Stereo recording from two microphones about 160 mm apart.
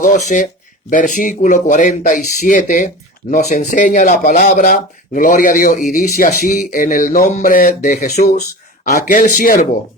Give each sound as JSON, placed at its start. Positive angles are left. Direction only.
{"t": 0.0, "sound": "speech", "side_deg": 50}